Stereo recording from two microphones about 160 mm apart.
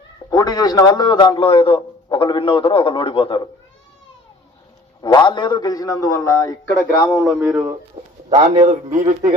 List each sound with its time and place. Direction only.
0.3 s a man's voice: 25° left (ahead or behind)
5.0 s a man's voice: 30° left (ahead or behind)
7.3 s speech: 5° right (ahead or behind)
8.0 s a man's voice: 35° right (ahead or behind)
8.3 s a man's voice: 45° right (ahead or behind)